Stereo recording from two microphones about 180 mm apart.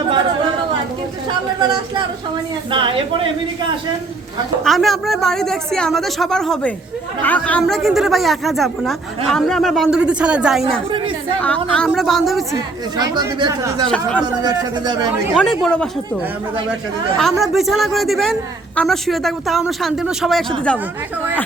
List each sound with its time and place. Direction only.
1.5 s speech: 25° right (ahead or behind)
4.6 s speech: centre (ahead or behind)
10.9 s speech: 30° right (ahead or behind)
11.3 s speech: 5° left (ahead or behind)
13.0 s speech: 25° right (ahead or behind)
15.3 s speech: centre (ahead or behind)
17.2 s speech: centre (ahead or behind)